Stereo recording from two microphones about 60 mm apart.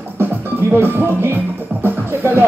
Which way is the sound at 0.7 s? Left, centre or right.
Right.